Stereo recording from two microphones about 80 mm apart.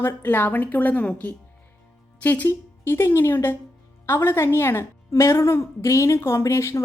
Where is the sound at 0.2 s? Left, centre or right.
Left.